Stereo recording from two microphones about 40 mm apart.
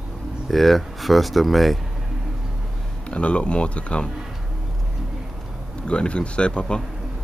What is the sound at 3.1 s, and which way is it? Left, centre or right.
Speech, left.